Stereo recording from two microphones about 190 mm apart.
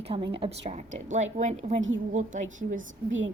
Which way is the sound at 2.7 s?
90° right.